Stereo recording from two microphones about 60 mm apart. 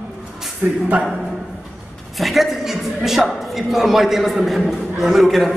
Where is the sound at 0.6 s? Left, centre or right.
Right.